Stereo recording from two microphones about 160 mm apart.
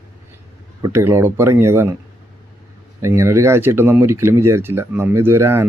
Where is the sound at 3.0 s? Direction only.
15° right (ahead or behind).